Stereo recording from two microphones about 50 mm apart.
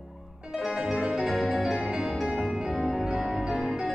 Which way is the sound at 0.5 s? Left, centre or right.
Centre.